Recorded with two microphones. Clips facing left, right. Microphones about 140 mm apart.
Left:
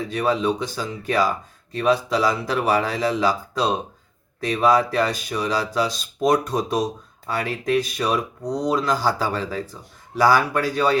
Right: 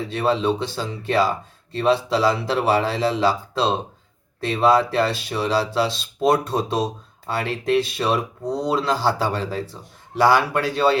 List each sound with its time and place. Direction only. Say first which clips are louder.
0.0 s speech: right 1 dB; 25° right (ahead or behind)